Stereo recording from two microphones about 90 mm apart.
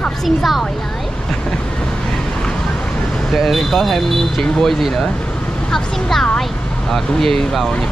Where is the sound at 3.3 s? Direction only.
Centre (ahead or behind).